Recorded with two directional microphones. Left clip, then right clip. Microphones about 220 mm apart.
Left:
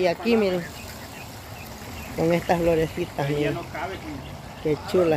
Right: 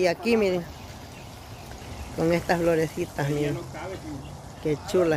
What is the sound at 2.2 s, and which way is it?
Speech, 5° right (ahead or behind).